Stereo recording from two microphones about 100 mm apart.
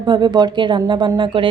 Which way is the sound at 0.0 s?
45° right (ahead or behind).